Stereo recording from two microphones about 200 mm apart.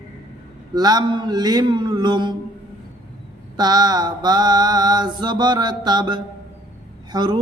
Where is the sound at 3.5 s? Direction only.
20° right (ahead or behind).